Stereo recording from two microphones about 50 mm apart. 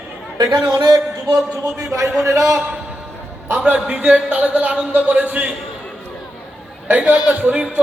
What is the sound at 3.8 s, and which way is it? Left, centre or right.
Speech, right.